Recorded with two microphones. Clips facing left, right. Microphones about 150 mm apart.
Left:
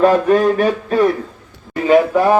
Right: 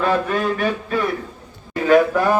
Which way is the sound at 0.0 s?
35° left (ahead or behind).